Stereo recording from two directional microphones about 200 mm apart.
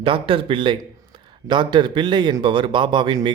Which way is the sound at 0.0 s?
25° right (ahead or behind).